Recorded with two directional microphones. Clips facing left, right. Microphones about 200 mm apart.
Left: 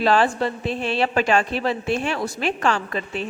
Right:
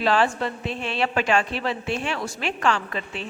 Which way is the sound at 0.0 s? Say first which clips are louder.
Left 3 dB; 40° left (ahead or behind).